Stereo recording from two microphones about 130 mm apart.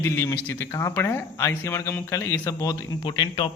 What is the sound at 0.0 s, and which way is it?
Speech, 20° left (ahead or behind).